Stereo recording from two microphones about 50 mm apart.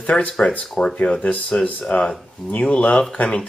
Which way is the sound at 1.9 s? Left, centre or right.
Left.